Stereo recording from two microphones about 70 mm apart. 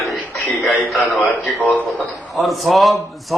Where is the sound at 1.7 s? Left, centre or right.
Left.